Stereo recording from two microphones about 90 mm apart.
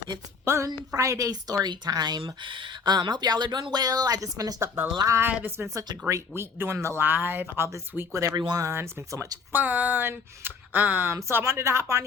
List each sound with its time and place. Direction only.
0.4 s a woman's voice: 30° right (ahead or behind)
5.3 s speech: 20° right (ahead or behind)
6.1 s speech: 30° right (ahead or behind)
8.4 s speech: 50° right (ahead or behind)
8.6 s speech: 30° right (ahead or behind)
9.5 s speech: 20° right (ahead or behind)